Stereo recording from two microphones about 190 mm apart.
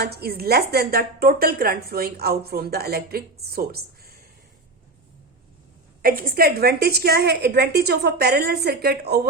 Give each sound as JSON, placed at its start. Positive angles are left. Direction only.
{"t": 0.0, "sound": "a woman's voice", "side_deg": -55}
{"t": 6.0, "sound": "a woman's voice", "side_deg": -50}